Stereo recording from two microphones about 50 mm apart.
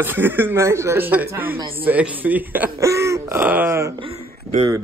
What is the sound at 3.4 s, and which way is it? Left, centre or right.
Speech, right.